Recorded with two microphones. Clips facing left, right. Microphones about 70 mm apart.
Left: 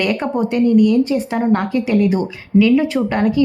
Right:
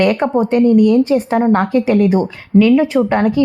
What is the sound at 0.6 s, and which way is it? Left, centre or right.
A woman's voice, right.